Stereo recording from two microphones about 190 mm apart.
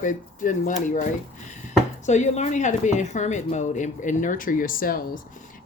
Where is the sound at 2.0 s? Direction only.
40° left (ahead or behind).